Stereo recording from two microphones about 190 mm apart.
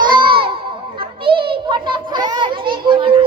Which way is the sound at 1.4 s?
25° right (ahead or behind).